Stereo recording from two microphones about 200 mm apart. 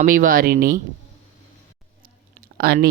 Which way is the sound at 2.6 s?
50° right (ahead or behind).